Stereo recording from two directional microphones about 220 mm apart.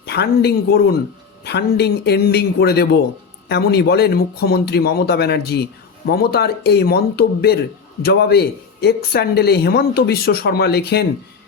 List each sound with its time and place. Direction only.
0.0 s speech: 50° left (ahead or behind)